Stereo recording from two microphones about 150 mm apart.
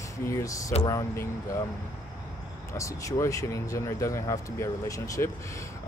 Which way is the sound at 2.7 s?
20° left (ahead or behind).